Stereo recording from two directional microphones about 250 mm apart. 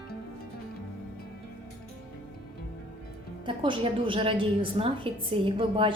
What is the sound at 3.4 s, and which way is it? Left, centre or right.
A woman's voice, centre.